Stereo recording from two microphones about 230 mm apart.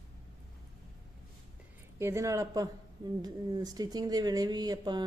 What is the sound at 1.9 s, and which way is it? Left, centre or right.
Speech, centre.